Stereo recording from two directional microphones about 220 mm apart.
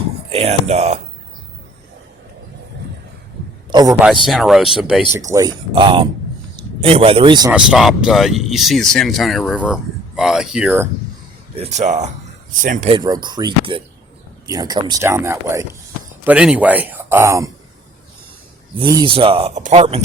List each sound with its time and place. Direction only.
0.3 s speech: 30° right (ahead or behind)
3.7 s a man's voice: 20° right (ahead or behind)
4.3 s speech: centre (ahead or behind)
5.3 s speech: 15° right (ahead or behind)
7.5 s speech: centre (ahead or behind)
11.5 s speech: 30° right (ahead or behind)
12.9 s speech: 20° right (ahead or behind)
18.8 s speech: 20° right (ahead or behind)